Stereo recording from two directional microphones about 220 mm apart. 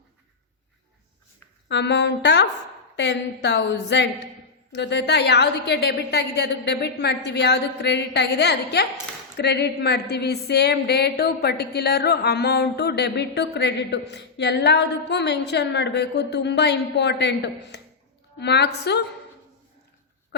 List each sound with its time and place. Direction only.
1.6 s speech: 50° left (ahead or behind)